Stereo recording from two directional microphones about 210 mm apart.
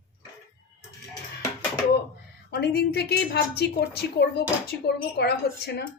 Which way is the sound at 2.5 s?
50° left (ahead or behind).